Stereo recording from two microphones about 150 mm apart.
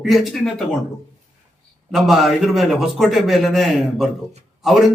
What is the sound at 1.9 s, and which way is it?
A man's voice, centre (ahead or behind).